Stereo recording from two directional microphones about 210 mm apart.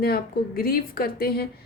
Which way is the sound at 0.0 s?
45° left (ahead or behind).